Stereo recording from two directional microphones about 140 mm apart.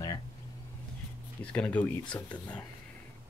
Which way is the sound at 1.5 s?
10° left (ahead or behind).